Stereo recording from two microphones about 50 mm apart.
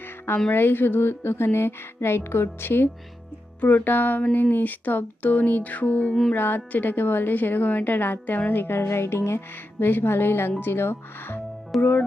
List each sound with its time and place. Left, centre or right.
0.5 s speech: left
1.5 s music: left
3.6 s a woman's voice: left
6.3 s a woman's voice: left
9.8 s speech: left